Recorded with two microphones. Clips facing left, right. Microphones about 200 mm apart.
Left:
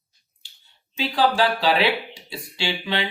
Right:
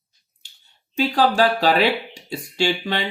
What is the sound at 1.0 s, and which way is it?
Speech, 45° right (ahead or behind).